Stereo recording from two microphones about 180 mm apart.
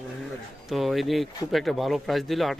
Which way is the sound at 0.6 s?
Centre (ahead or behind).